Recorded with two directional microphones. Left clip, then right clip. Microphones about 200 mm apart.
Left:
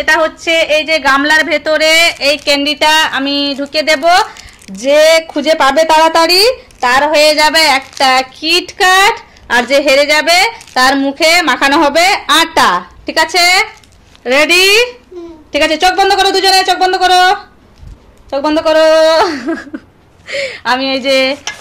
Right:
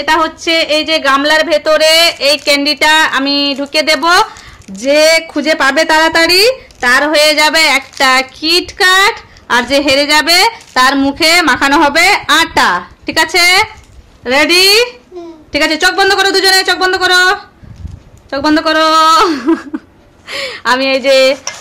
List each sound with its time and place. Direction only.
0.0 s a woman's voice: 15° right (ahead or behind)
6.8 s a sound: 20° right (ahead or behind)
8.0 s a woman's voice: 15° right (ahead or behind)